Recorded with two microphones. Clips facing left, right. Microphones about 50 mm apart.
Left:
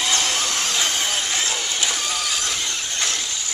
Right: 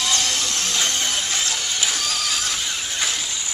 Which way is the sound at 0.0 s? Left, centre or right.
Left.